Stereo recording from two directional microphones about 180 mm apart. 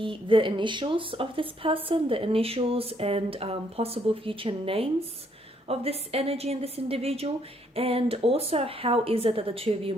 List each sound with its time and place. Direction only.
0.0 s a woman's voice: 30° right (ahead or behind)